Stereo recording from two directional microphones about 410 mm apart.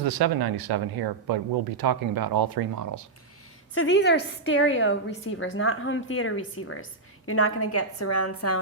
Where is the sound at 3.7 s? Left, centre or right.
Left.